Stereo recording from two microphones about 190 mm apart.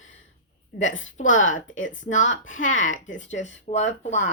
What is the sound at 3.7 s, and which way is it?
Speech, 40° left (ahead or behind).